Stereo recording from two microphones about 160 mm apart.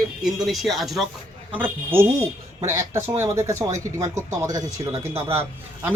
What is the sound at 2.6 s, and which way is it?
Speech, 20° right (ahead or behind).